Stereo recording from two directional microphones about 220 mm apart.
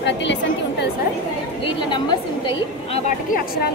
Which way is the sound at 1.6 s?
20° left (ahead or behind).